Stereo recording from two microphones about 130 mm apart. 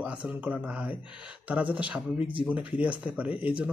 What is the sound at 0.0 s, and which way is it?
A man's voice, 10° right (ahead or behind).